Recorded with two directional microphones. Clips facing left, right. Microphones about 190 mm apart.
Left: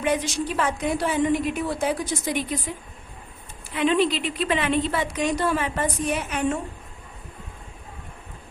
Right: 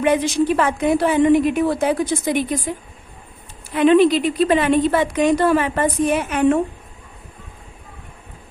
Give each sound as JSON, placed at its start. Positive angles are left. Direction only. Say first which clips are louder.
{"t": 0.0, "sound": "a woman's voice", "louder": "right 7 dB", "side_deg": -60}
{"t": 3.8, "sound": "a woman's voice", "louder": "right 8 dB", "side_deg": -55}